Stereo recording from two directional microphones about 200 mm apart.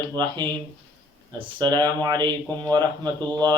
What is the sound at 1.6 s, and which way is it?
Speech, 20° right (ahead or behind).